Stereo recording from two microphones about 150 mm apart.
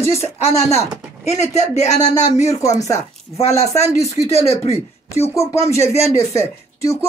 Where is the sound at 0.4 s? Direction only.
45° left (ahead or behind).